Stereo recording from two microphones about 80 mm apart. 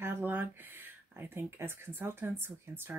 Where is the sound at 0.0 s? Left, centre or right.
Right.